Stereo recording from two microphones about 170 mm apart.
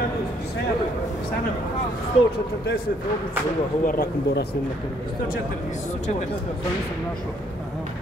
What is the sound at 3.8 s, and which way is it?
Speech, 65° left (ahead or behind).